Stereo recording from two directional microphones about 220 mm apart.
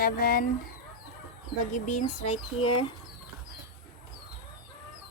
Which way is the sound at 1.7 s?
30° left (ahead or behind).